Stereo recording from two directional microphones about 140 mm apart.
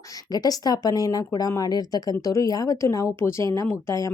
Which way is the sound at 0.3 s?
30° left (ahead or behind).